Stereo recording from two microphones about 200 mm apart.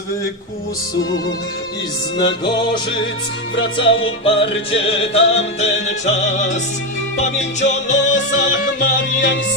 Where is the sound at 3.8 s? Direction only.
65° left (ahead or behind).